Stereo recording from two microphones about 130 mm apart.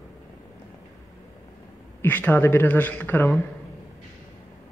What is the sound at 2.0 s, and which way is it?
Speech, 15° left (ahead or behind).